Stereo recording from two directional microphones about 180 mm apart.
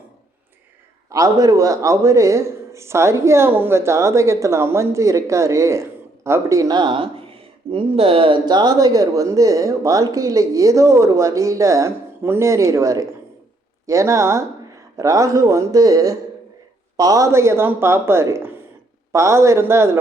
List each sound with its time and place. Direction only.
1.1 s speech: 20° right (ahead or behind)